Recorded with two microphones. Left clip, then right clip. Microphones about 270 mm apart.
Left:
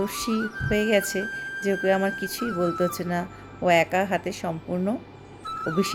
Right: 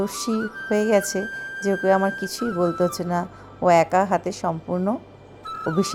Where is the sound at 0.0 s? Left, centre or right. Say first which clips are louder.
Right 2 dB; centre.